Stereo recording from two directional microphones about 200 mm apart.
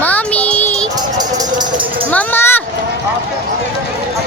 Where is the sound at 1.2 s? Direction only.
20° right (ahead or behind).